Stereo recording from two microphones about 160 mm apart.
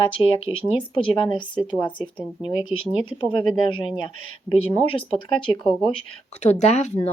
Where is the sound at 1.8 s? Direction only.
30° left (ahead or behind).